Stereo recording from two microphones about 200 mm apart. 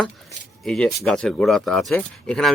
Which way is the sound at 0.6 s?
5° left (ahead or behind).